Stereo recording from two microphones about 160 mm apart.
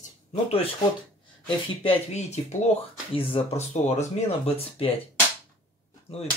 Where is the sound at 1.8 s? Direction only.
45° left (ahead or behind).